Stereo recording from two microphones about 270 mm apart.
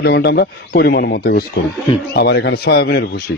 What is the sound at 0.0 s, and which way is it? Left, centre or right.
Speech, left.